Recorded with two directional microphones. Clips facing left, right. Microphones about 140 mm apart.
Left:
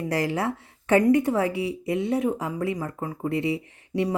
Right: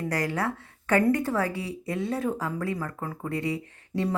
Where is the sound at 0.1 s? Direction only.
25° left (ahead or behind).